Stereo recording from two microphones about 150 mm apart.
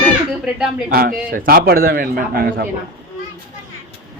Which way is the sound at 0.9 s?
75° right (ahead or behind).